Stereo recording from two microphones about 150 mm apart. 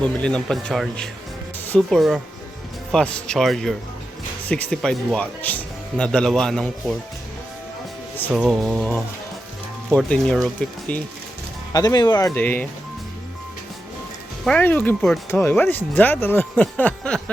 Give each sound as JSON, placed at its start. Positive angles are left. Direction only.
{"t": 0.0, "sound": "speech", "side_deg": 5}
{"t": 1.5, "sound": "music", "side_deg": 10}
{"t": 2.0, "sound": "speech", "side_deg": 0}
{"t": 8.3, "sound": "speech", "side_deg": 0}
{"t": 9.9, "sound": "speech", "side_deg": 0}
{"t": 11.7, "sound": "speech", "side_deg": 25}
{"t": 12.3, "sound": "speech", "side_deg": 10}
{"t": 14.4, "sound": "speech", "side_deg": 10}